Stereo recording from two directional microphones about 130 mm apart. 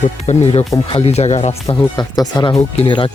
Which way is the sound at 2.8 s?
45° left (ahead or behind).